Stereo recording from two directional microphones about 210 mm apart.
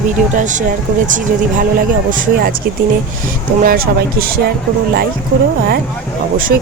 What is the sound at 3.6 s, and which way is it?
Speech, 45° right (ahead or behind).